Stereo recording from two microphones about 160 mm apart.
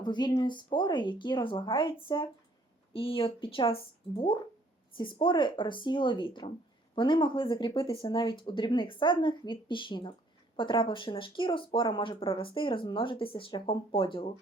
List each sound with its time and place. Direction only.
0.0 s speech: 25° left (ahead or behind)
4.9 s speech: 30° left (ahead or behind)